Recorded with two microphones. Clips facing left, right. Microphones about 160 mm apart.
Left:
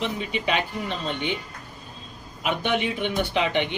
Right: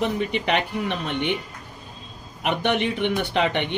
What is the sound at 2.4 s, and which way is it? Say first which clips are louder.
Speech: right 2 dB; 60° right (ahead or behind).